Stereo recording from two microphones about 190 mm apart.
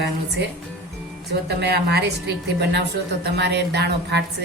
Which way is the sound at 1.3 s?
60° right (ahead or behind).